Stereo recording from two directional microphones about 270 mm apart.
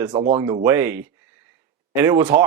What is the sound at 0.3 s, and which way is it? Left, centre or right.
Speech, centre.